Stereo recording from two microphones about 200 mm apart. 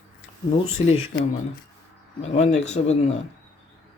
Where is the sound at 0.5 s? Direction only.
30° left (ahead or behind).